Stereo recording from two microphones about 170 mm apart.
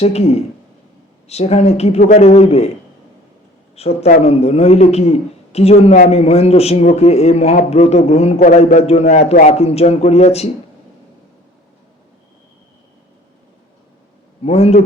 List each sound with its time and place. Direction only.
0.0 s speech: 40° left (ahead or behind)
3.8 s speech: 35° left (ahead or behind)
14.4 s speech: 40° left (ahead or behind)